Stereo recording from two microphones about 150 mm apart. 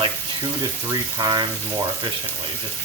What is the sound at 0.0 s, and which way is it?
Speech, 30° right (ahead or behind).